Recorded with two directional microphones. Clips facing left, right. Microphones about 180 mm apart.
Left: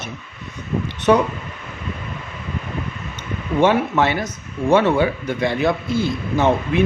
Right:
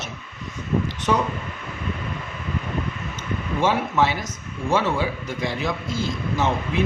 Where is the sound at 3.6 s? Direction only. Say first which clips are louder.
Left 5 dB; 60° left (ahead or behind).